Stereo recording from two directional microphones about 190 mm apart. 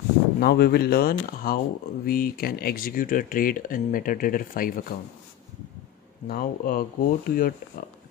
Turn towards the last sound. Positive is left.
turn(degrees=50)  # may be behind; listen again after turning